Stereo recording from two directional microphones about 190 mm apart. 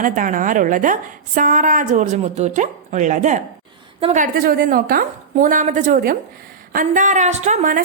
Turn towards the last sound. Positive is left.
turn(degrees=-45)  # may be behind; listen again after turning